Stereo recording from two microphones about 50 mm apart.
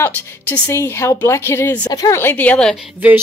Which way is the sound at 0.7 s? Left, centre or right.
Left.